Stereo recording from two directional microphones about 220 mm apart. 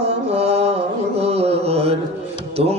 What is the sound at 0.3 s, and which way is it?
Mantra, 30° right (ahead or behind).